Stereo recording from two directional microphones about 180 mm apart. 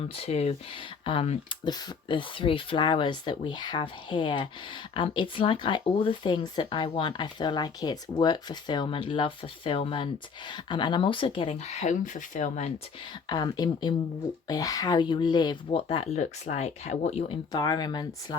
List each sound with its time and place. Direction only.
0.0 s speech: 35° left (ahead or behind)
13.2 s speech: 25° left (ahead or behind); by 17.3 s 40° left (ahead or behind)
17.5 s speech: 20° left (ahead or behind)